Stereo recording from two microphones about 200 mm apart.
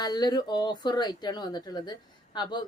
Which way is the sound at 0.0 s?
20° left (ahead or behind).